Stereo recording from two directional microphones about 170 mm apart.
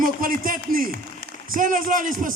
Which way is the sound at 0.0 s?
55° right (ahead or behind).